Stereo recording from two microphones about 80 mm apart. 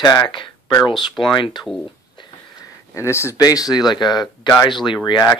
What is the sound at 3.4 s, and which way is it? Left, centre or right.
Speech, left.